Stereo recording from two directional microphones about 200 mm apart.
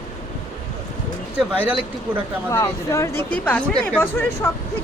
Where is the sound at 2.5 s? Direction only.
15° left (ahead or behind).